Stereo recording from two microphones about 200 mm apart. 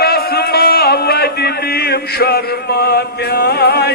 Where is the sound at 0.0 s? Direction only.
50° left (ahead or behind).